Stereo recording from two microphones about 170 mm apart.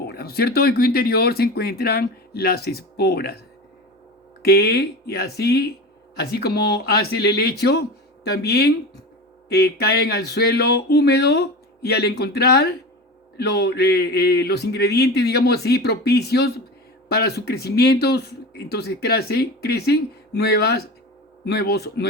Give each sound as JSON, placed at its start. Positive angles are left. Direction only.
{"t": 0.0, "sound": "speech", "side_deg": 65}
{"t": 4.4, "sound": "speech", "side_deg": 70}